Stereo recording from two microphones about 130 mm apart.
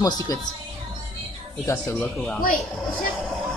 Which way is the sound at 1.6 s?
20° left (ahead or behind).